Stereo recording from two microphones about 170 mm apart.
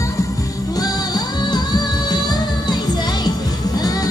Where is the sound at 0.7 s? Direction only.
20° left (ahead or behind).